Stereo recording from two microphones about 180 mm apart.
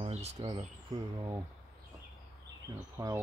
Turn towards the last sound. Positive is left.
turn(degrees=-20)  # may be behind; listen again after turning